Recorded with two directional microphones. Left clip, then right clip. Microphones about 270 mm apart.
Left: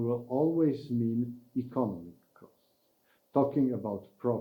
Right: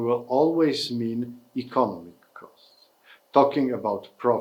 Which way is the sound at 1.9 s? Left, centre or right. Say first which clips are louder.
Right 6 dB; centre.